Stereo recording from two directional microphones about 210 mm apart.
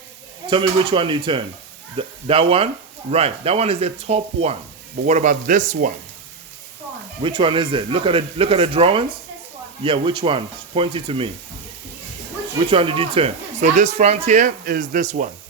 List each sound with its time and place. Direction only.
0.4 s speech: 25° right (ahead or behind); by 5.9 s 40° right (ahead or behind)
7.2 s speech: 25° right (ahead or behind)
12.7 s speech: 25° right (ahead or behind)